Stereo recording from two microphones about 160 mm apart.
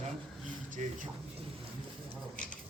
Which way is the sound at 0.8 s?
45° right (ahead or behind).